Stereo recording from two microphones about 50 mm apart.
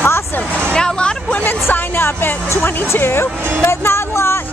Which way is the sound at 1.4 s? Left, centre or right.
Left.